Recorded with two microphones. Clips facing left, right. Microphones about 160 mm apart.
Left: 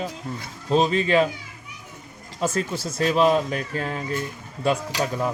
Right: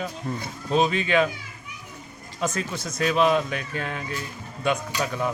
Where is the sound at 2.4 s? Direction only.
30° left (ahead or behind).